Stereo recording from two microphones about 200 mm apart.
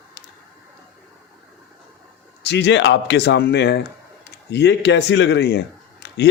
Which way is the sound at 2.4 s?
55° left (ahead or behind).